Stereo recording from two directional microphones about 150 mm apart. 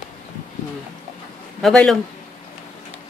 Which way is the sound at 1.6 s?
5° left (ahead or behind).